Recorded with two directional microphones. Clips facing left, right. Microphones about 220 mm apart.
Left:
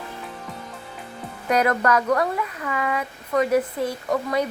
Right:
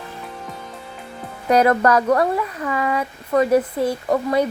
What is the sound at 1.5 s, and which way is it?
Speech, 35° right (ahead or behind).